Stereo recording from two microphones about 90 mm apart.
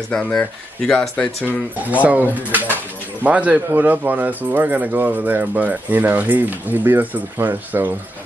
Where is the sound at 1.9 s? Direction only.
15° right (ahead or behind).